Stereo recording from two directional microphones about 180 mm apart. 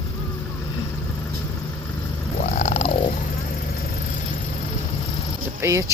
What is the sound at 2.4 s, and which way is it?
Purr, 40° left (ahead or behind).